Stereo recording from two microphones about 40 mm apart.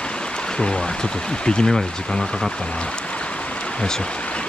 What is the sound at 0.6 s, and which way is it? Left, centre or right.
Speech, centre.